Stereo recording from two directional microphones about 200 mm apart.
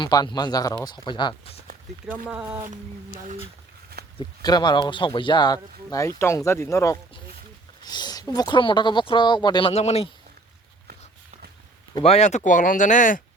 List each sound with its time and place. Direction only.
0.0 s speech: 20° left (ahead or behind)
2.4 s speech: 15° right (ahead or behind)
4.2 s speech: 20° left (ahead or behind)
11.9 s speech: 30° left (ahead or behind)